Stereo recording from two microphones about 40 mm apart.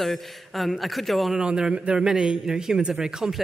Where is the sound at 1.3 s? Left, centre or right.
Centre.